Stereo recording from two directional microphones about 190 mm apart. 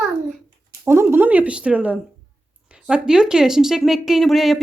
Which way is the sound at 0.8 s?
10° right (ahead or behind).